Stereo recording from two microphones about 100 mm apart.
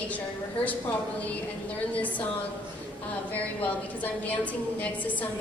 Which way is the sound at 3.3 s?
15° left (ahead or behind).